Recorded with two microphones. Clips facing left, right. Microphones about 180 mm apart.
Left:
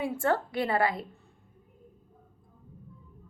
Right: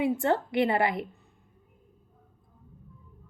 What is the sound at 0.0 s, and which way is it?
A woman's voice, 20° right (ahead or behind).